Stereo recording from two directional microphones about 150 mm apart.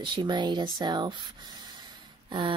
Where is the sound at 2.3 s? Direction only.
35° right (ahead or behind).